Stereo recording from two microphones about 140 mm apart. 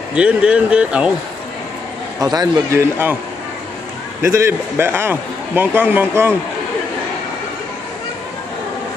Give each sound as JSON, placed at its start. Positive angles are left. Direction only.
{"t": 0.1, "sound": "speech", "side_deg": -5}
{"t": 2.2, "sound": "a man's voice", "side_deg": -25}
{"t": 4.2, "sound": "speech", "side_deg": -20}